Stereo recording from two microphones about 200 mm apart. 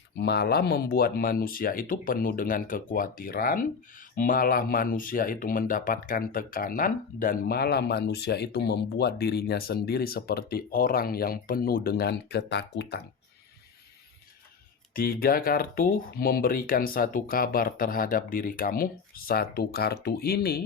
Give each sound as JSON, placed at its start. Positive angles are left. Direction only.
{"t": 0.2, "sound": "speech", "side_deg": 55}
{"t": 14.9, "sound": "speech", "side_deg": 45}